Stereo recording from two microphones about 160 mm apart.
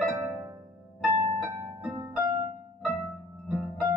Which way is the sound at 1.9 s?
20° right (ahead or behind).